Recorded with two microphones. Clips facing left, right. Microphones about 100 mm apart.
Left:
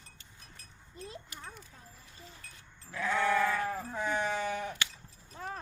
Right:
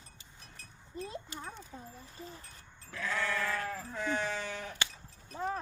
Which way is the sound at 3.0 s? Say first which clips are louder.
Left 6 dB; 20° left (ahead or behind).